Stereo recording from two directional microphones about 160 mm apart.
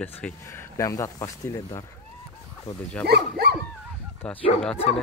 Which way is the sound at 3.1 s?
90° right.